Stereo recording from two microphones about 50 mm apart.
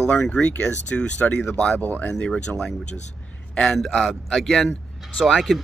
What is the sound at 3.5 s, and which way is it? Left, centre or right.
A man's voice, centre.